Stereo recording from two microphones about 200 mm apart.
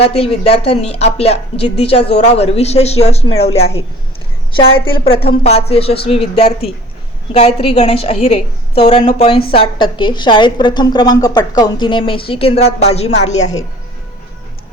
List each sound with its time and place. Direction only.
0.0 s a woman's voice: 30° left (ahead or behind)
4.9 s a woman's voice: 30° left (ahead or behind)
7.3 s a woman's voice: 30° left (ahead or behind)